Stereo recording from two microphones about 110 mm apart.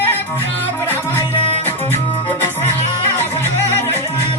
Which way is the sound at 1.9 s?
20° left (ahead or behind).